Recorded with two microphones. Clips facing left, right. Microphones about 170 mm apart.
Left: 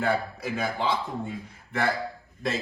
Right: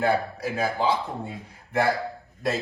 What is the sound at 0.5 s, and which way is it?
Speech, 40° right (ahead or behind).